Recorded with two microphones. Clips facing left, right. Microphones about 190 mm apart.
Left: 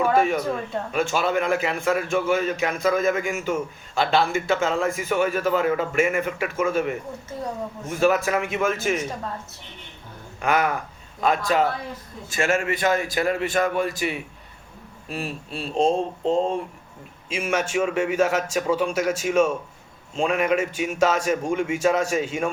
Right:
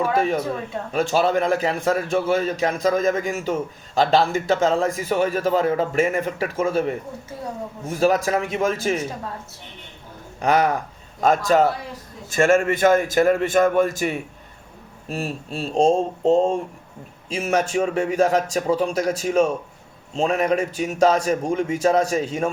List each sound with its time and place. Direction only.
0.9 s a man's voice: 35° right (ahead or behind)
10.4 s a man's voice: 35° right (ahead or behind)